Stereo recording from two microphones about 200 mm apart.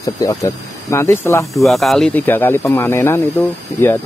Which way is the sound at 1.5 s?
Centre (ahead or behind).